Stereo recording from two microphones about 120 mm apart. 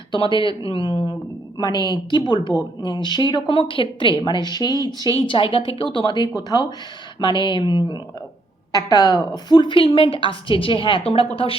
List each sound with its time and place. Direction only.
0.1 s a woman's voice: 45° left (ahead or behind)
5.1 s a woman's voice: 45° left (ahead or behind)